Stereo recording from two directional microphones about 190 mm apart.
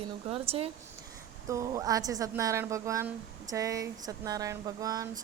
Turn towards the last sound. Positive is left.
turn(degrees=-20)  # may be behind; listen again after turning